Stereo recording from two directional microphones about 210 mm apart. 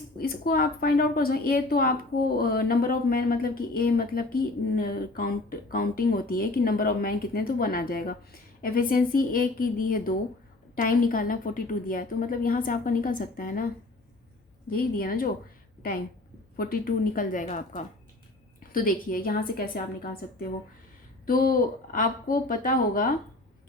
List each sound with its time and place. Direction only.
0.2 s a woman's voice: 45° left (ahead or behind)
14.7 s a woman's voice: 45° left (ahead or behind)
16.6 s a woman's voice: 45° left (ahead or behind)